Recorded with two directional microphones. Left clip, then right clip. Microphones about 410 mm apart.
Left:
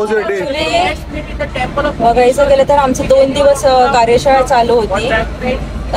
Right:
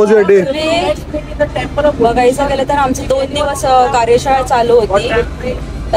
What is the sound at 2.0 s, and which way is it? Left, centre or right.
Speech, centre.